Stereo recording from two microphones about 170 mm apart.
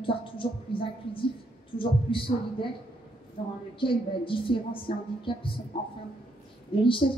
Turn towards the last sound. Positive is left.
turn(degrees=30)  # may be behind; listen again after turning